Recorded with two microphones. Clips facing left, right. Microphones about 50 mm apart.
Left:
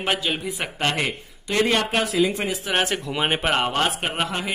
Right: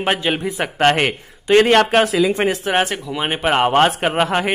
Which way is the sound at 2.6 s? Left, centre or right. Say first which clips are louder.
Right 5 dB; right.